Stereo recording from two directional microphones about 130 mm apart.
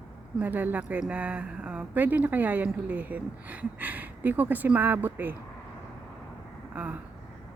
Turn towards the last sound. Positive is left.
turn(degrees=-10)  # may be behind; listen again after turning